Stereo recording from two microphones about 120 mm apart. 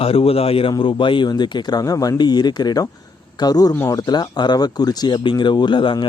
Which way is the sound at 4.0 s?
35° left (ahead or behind).